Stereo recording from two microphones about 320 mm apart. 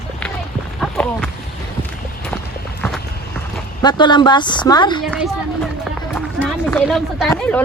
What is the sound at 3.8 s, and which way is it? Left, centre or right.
A woman's voice, centre.